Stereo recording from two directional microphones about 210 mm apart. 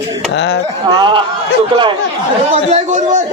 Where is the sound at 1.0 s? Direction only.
25° right (ahead or behind).